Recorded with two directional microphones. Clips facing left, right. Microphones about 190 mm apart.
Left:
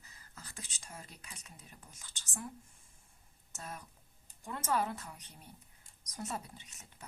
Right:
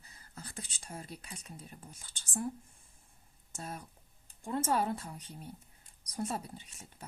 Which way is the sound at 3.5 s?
30° right (ahead or behind).